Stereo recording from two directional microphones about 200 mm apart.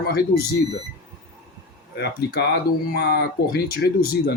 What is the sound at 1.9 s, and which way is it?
Speech, 55° left (ahead or behind).